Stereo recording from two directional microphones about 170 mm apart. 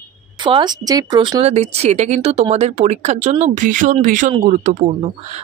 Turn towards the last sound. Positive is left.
turn(degrees=-40)  # may be behind; listen again after turning